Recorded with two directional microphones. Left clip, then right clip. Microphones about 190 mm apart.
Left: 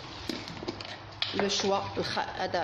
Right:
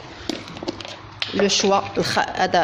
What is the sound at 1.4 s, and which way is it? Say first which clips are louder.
Speech: right 11 dB; 45° right (ahead or behind).